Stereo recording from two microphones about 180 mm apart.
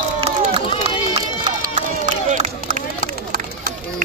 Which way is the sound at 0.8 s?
35° right (ahead or behind).